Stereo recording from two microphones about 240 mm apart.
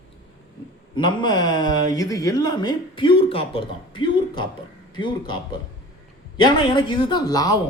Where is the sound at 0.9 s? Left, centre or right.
Centre.